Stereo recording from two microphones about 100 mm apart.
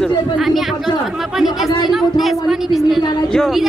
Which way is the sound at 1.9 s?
Centre (ahead or behind).